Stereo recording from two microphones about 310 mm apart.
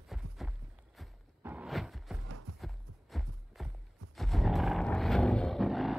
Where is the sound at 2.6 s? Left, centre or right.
Centre.